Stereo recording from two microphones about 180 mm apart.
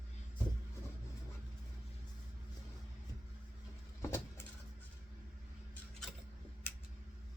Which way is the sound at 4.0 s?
15° left (ahead or behind).